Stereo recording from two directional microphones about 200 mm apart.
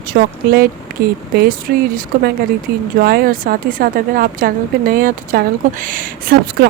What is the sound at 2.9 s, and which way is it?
Speech, 50° right (ahead or behind).